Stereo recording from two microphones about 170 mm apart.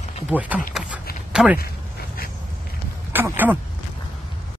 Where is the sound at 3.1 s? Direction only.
10° right (ahead or behind).